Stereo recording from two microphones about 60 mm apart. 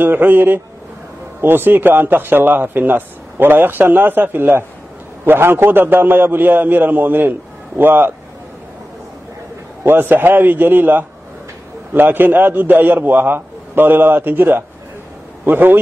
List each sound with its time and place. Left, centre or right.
0.0 s speech: right
9.8 s speech: right